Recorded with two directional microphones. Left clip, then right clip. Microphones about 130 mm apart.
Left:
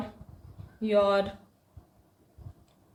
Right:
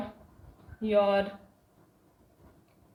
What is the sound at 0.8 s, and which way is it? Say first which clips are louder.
Speech: left 1 dB; 55° left (ahead or behind).